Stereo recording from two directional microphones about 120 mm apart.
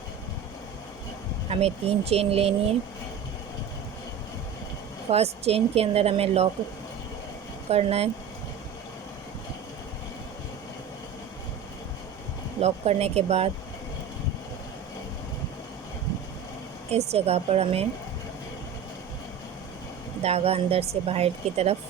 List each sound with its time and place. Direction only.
1.5 s speech: 60° right (ahead or behind)
5.1 s speech: 60° right (ahead or behind)
7.7 s speech: 55° right (ahead or behind)
12.5 s speech: 60° right (ahead or behind)
16.9 s speech: 60° right (ahead or behind)
20.2 s speech: 55° right (ahead or behind)